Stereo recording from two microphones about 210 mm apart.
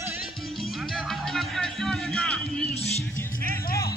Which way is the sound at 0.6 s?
Centre (ahead or behind).